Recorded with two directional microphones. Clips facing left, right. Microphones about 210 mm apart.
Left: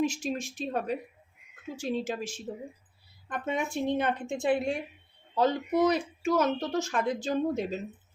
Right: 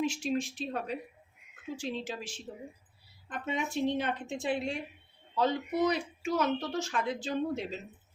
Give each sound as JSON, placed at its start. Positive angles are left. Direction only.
{"t": 0.0, "sound": "speech", "side_deg": 45}